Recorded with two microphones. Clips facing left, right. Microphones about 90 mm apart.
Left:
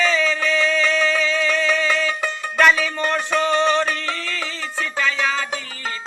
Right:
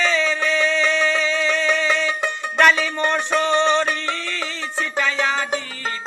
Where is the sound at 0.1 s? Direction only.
25° right (ahead or behind).